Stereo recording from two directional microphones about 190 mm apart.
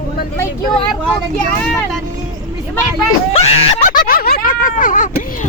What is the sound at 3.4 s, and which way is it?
Speech, 35° left (ahead or behind).